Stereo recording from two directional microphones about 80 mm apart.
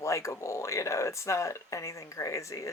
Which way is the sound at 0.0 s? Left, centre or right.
Left.